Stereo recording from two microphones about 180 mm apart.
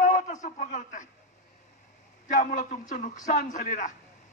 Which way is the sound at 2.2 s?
45° left (ahead or behind).